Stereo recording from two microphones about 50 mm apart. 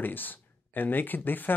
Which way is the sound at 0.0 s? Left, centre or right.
Left.